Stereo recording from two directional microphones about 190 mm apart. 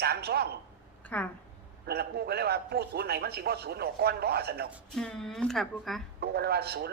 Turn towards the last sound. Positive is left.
turn(degrees=-55)  # may be behind; listen again after turning